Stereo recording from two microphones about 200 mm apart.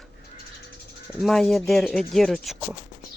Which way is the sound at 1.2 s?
Centre (ahead or behind).